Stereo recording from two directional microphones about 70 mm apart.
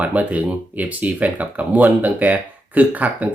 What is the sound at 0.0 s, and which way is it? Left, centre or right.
Speech, right.